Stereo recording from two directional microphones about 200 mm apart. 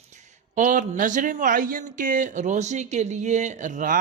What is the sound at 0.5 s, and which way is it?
Speech, 40° right (ahead or behind).